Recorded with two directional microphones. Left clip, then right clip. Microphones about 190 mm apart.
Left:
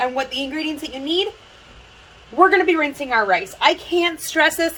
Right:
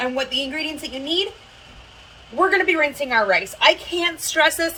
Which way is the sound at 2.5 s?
30° left (ahead or behind).